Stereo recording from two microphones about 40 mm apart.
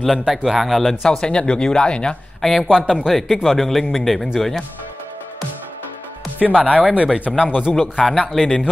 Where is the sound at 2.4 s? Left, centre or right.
Centre.